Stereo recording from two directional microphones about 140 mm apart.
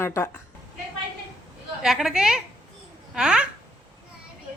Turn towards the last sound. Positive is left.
turn(degrees=-5)  # may be behind; listen again after turning